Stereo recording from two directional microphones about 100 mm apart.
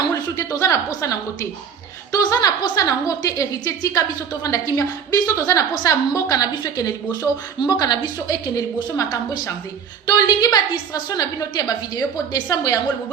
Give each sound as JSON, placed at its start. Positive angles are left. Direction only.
{"t": 0.3, "sound": "a woman's voice", "side_deg": 35}